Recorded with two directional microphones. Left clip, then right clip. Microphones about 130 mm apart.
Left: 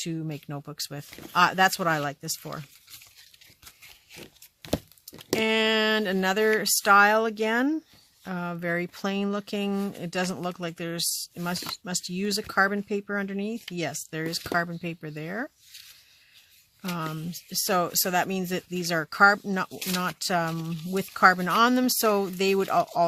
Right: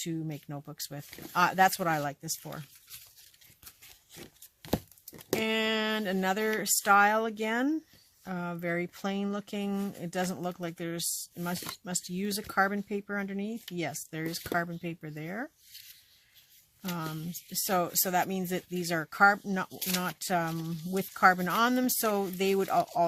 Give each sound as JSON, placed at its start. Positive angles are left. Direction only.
{"t": 0.0, "sound": "speech", "side_deg": 35}
{"t": 4.1, "sound": "a sound", "side_deg": 20}
{"t": 5.0, "sound": "speech", "side_deg": 35}
{"t": 17.0, "sound": "speech", "side_deg": 40}
{"t": 20.5, "sound": "speech", "side_deg": 25}
{"t": 20.9, "sound": "speech", "side_deg": 40}